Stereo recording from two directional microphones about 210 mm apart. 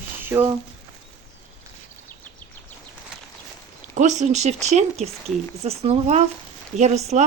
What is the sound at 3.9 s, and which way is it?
Speech, 35° right (ahead or behind).